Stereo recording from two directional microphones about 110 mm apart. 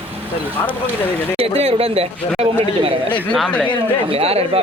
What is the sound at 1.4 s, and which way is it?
Speech, 65° right (ahead or behind).